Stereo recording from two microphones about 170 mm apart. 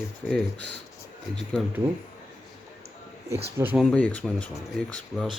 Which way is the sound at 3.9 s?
10° left (ahead or behind).